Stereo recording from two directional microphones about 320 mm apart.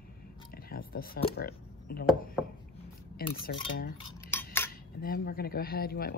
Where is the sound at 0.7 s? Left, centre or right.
Left.